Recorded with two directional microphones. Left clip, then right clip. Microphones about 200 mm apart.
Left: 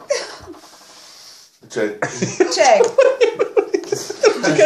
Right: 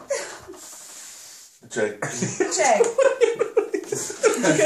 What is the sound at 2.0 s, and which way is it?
Speech, 35° left (ahead or behind).